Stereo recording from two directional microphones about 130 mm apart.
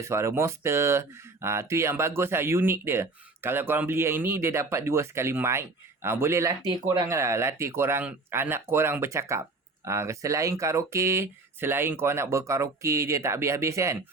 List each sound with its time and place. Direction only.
0.0 s speech: 20° right (ahead or behind)